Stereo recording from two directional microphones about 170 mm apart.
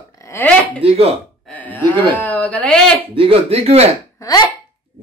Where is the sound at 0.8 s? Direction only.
35° right (ahead or behind).